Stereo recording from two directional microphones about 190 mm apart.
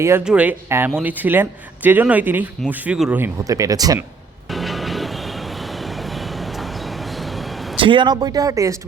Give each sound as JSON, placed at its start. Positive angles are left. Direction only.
{"t": 0.0, "sound": "speech", "side_deg": -10}
{"t": 4.5, "sound": "vehicle", "side_deg": 0}
{"t": 5.8, "sound": "train", "side_deg": 0}
{"t": 7.8, "sound": "speech", "side_deg": -25}